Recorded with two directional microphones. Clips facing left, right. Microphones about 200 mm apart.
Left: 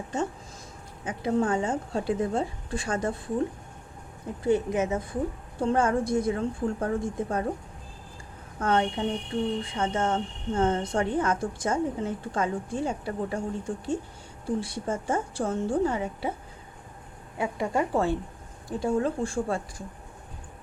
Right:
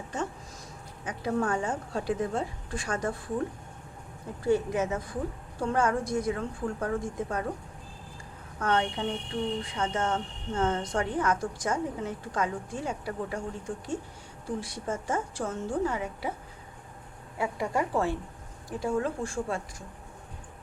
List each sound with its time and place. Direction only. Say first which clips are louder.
1.0 s a woman's voice: left 3 dB; 25° left (ahead or behind)
4.4 s a woman's voice: left 2 dB; 20° left (ahead or behind)
8.5 s a woman's voice: left 3 dB; 30° left (ahead or behind)
17.3 s a woman's voice: left 2 dB; 25° left (ahead or behind)